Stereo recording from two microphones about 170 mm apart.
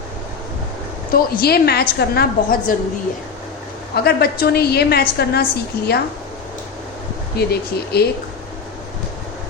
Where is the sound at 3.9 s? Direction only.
65° left (ahead or behind).